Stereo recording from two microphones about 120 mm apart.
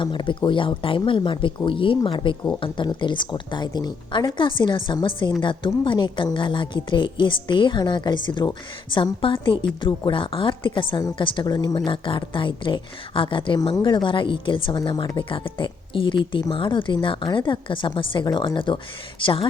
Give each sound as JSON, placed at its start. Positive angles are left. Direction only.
{"t": 0.0, "sound": "a woman's voice", "side_deg": 40}